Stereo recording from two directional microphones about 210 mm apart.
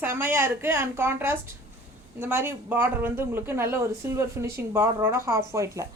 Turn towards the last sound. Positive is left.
turn(degrees=-15)  # may be behind; listen again after turning